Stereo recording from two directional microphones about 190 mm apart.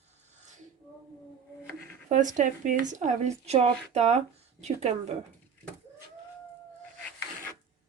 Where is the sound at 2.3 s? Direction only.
40° right (ahead or behind).